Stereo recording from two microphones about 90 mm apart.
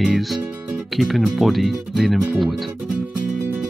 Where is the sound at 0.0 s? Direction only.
Centre (ahead or behind).